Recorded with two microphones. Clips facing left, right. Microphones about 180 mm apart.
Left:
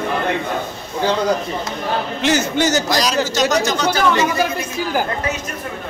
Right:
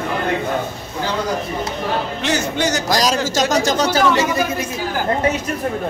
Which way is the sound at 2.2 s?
Centre (ahead or behind).